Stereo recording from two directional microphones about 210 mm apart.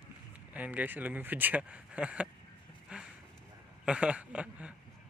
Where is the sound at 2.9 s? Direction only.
5° right (ahead or behind).